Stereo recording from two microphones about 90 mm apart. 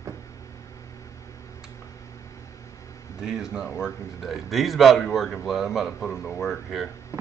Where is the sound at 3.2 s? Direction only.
5° right (ahead or behind).